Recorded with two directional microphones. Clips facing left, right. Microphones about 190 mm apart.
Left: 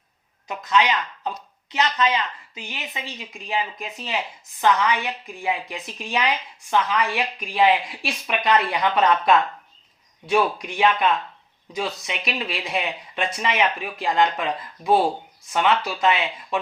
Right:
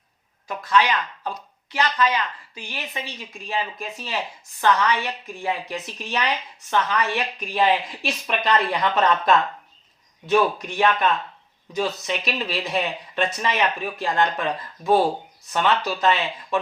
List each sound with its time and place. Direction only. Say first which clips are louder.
0.4 s a woman's voice: even; 20° left (ahead or behind)